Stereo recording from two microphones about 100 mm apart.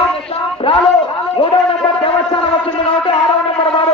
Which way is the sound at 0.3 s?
60° left (ahead or behind).